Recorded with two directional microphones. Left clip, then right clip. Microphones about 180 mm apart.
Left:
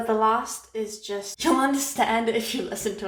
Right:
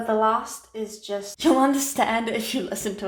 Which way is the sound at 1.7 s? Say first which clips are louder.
Even; 45° right (ahead or behind).